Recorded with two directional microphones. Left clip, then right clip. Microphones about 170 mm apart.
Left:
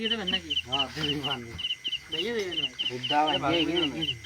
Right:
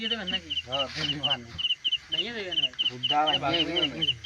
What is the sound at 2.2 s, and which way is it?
Speech, 40° right (ahead or behind).